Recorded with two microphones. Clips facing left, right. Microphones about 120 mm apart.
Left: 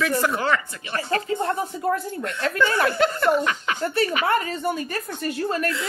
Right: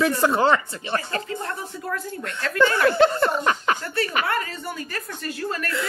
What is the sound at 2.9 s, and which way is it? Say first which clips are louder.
Speech: right 1 dB; 25° right (ahead or behind).